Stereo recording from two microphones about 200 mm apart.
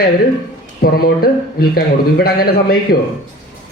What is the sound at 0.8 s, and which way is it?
Speech, 50° left (ahead or behind).